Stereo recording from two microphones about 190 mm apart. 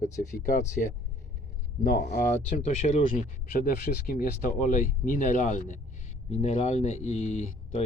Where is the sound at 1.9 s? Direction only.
60° left (ahead or behind).